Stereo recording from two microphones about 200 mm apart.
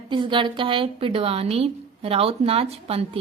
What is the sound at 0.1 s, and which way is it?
A woman's voice, 25° right (ahead or behind).